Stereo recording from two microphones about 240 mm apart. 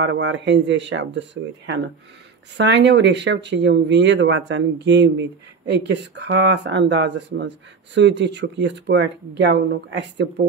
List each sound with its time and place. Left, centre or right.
0.0 s speech: right